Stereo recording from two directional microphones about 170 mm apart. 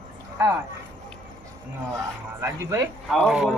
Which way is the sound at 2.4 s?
15° right (ahead or behind).